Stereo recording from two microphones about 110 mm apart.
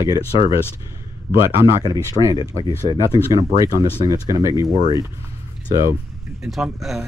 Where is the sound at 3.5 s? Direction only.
30° right (ahead or behind).